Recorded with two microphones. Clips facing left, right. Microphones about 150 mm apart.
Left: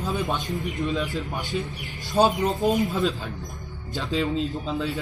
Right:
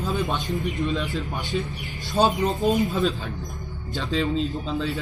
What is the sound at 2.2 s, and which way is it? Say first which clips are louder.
Speech: left 1 dB; 20° left (ahead or behind).